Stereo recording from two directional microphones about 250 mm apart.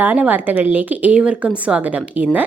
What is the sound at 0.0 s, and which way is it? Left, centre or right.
Speech, centre.